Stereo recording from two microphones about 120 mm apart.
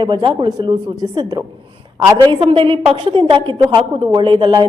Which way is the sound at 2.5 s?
45° right (ahead or behind).